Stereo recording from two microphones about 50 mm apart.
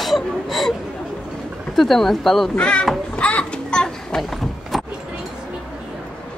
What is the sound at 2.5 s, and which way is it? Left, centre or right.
Speech, left.